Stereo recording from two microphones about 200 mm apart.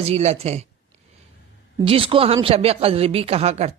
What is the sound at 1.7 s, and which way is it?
Speech, 25° right (ahead or behind).